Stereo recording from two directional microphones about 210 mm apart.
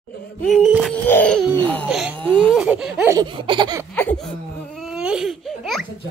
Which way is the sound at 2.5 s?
5° right (ahead or behind).